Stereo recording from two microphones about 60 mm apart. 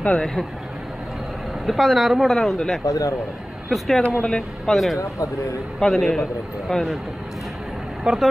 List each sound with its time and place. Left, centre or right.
0.1 s a man's voice: centre
1.7 s speech: centre
2.8 s speech: left
3.7 s a man's voice: centre
8.0 s speech: centre